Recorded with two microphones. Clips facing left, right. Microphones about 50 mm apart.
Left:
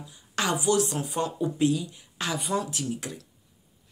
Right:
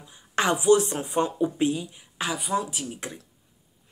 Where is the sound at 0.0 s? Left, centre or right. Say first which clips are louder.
Right 4 dB; right.